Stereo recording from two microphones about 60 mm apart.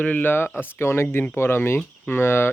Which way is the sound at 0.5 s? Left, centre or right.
Left.